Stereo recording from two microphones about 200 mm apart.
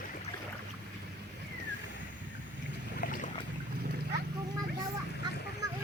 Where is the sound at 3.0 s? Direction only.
45° left (ahead or behind).